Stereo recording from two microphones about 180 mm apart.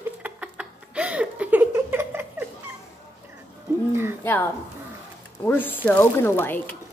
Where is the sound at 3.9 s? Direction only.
15° right (ahead or behind).